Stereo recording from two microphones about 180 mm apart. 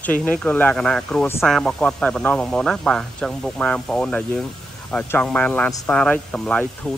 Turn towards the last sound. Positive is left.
turn(degrees=5)  # may be behind; listen again after turning